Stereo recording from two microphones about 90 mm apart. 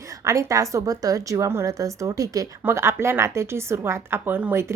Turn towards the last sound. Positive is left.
turn(degrees=-25)  # may be behind; listen again after turning